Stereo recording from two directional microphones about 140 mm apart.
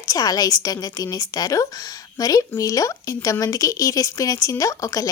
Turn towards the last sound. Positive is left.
turn(degrees=25)  # may be behind; listen again after turning